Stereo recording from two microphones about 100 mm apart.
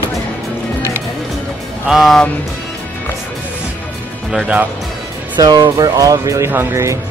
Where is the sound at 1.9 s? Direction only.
Centre (ahead or behind).